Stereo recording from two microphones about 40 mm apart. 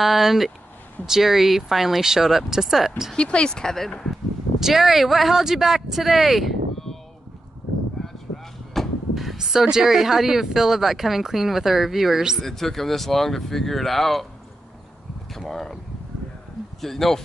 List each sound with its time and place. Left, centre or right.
0.0 s speech: centre
3.2 s speech: left
4.1 s speech: centre
8.7 s a sound: centre
9.5 s speech: centre
12.4 s speech: centre
15.3 s speech: centre
16.8 s speech: centre